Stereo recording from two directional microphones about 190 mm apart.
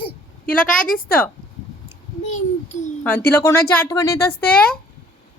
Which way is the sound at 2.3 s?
40° left (ahead or behind).